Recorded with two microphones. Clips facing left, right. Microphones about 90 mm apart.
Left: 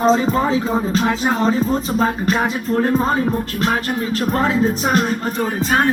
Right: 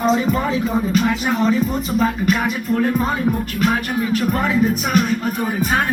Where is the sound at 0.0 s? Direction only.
30° left (ahead or behind).